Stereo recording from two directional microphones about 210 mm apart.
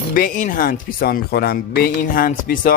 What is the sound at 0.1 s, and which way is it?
Speech, 40° left (ahead or behind).